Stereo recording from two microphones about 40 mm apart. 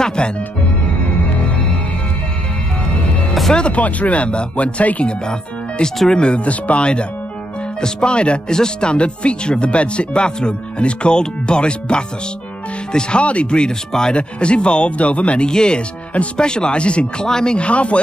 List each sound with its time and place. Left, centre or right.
0.0 s speech: left
3.5 s speech: left
6.0 s speech: left
15.4 s speech: left
17.6 s speech: left